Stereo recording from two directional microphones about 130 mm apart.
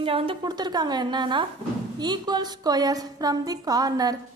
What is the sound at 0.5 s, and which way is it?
A woman's voice, 30° right (ahead or behind).